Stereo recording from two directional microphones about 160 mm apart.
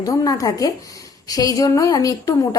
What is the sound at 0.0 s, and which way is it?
A woman's voice, 20° left (ahead or behind).